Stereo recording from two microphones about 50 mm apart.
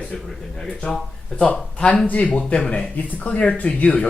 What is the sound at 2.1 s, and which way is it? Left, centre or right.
Speech, left.